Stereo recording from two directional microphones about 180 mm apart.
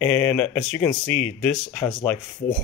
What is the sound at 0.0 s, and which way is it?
Speech, 10° left (ahead or behind).